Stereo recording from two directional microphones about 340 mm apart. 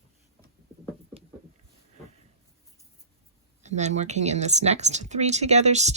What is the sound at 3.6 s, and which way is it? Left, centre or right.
Speech, centre.